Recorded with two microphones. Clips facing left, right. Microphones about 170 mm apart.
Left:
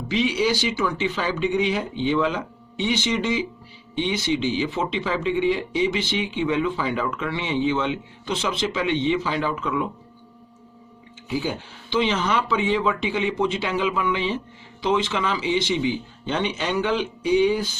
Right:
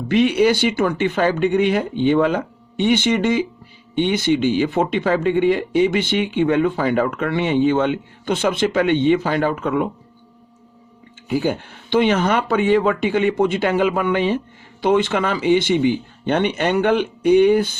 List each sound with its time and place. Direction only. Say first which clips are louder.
0.1 s speech: right 7 dB; 55° right (ahead or behind)
11.3 s speech: right 6 dB; 55° right (ahead or behind)